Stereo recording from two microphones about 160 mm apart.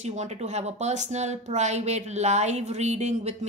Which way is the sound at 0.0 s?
45° right (ahead or behind).